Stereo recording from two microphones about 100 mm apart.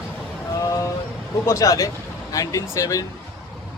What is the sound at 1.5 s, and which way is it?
Speech, 35° left (ahead or behind).